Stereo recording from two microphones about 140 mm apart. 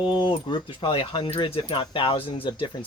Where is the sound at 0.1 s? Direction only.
35° left (ahead or behind).